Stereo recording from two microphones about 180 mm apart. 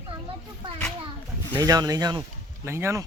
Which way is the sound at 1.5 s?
20° right (ahead or behind).